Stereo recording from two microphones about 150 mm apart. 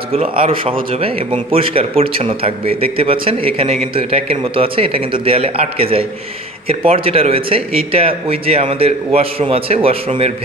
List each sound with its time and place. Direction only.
0.1 s speech: 40° right (ahead or behind)